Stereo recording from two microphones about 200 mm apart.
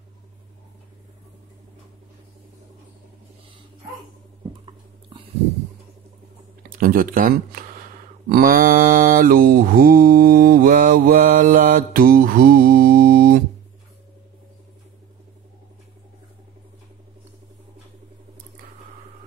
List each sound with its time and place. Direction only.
5.1 s a sound: 25° right (ahead or behind)
6.7 s speech: 45° right (ahead or behind)
8.3 s mantra: 45° right (ahead or behind)